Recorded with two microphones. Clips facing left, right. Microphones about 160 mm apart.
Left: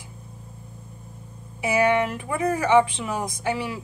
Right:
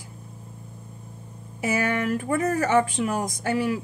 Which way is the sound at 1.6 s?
45° right (ahead or behind).